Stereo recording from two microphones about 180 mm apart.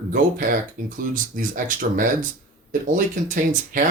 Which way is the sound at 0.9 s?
50° right (ahead or behind).